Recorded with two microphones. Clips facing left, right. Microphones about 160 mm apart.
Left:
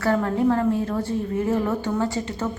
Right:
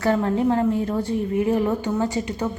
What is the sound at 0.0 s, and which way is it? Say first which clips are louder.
A woman's voice: right 1 dB; 20° right (ahead or behind).